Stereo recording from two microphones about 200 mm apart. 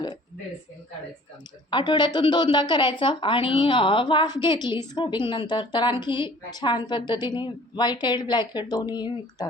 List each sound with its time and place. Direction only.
1.7 s a woman's voice: 25° left (ahead or behind)